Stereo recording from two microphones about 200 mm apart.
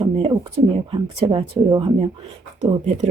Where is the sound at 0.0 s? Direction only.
25° right (ahead or behind).